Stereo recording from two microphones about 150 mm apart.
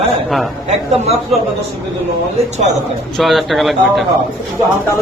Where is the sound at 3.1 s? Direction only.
Centre (ahead or behind).